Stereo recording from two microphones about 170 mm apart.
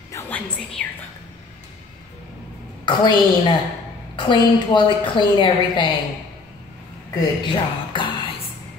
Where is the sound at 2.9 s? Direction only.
25° left (ahead or behind).